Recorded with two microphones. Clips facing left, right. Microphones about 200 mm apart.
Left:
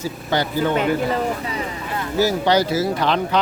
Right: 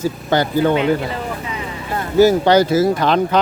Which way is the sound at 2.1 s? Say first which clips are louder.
Right 6 dB; 50° right (ahead or behind).